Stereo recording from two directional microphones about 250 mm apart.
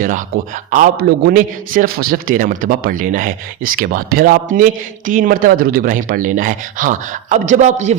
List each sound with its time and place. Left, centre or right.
0.0 s a man's voice: right